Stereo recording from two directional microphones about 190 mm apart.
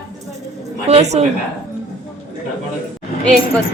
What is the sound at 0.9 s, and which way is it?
Speech, 35° right (ahead or behind).